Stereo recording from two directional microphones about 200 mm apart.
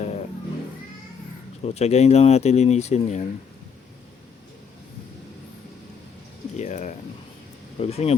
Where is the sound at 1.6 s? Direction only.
30° left (ahead or behind).